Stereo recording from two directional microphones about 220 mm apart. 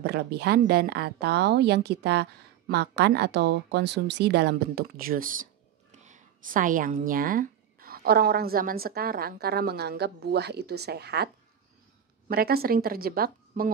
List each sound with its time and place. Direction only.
0.0 s speech: 50° right (ahead or behind)
12.3 s speech: 45° right (ahead or behind)